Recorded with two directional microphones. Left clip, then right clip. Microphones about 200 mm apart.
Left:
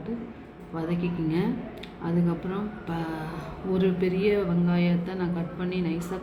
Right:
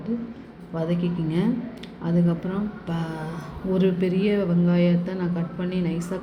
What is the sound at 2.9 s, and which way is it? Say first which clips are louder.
Speech: right 1 dB; 10° right (ahead or behind).